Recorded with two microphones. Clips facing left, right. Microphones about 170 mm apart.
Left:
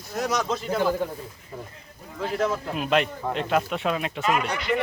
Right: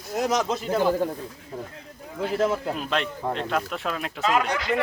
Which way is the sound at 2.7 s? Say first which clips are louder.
Left 4 dB; 5° left (ahead or behind).